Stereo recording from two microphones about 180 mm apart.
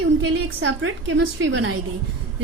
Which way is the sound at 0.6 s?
85° right.